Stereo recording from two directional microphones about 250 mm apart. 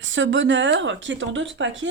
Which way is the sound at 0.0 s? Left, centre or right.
Right.